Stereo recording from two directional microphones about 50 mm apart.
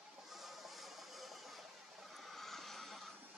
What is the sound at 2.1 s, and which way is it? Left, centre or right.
Vehicle, centre.